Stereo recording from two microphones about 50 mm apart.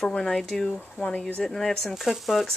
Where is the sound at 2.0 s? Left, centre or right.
Centre.